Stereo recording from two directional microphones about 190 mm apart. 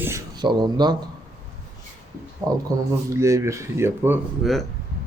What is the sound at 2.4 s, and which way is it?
Speech, 20° right (ahead or behind).